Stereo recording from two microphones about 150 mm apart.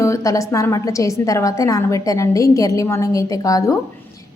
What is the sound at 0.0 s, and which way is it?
A woman's voice, 20° left (ahead or behind).